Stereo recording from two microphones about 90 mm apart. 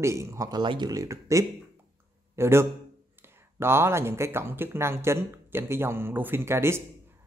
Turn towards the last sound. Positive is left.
turn(degrees=-30)  # may be behind; listen again after turning